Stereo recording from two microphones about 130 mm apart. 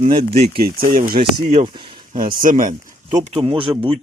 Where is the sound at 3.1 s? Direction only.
65° right (ahead or behind).